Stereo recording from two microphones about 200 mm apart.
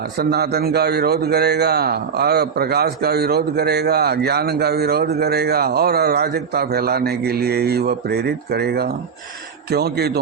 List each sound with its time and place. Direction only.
0.2 s a man's voice: 50° right (ahead or behind)